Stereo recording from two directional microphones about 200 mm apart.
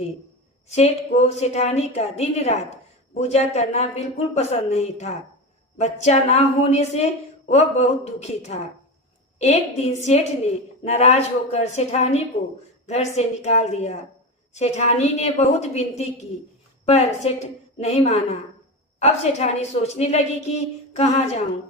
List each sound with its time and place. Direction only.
0.7 s a woman's voice: 35° left (ahead or behind)